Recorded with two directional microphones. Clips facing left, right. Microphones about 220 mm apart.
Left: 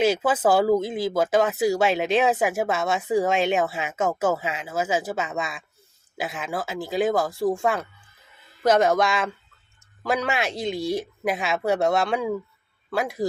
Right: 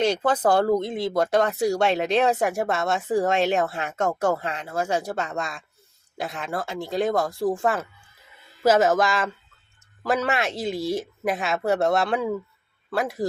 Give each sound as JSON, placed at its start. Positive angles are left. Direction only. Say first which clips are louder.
{"t": 0.0, "sound": "speech", "louder": "left 1 dB", "side_deg": 5}